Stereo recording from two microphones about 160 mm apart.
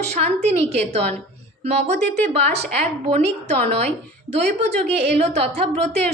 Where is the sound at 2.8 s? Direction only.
40° right (ahead or behind).